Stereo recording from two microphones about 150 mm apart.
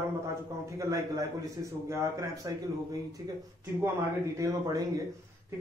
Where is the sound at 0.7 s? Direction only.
20° right (ahead or behind).